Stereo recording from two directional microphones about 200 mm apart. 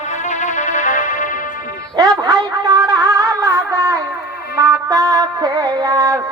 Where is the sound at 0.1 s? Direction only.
35° left (ahead or behind).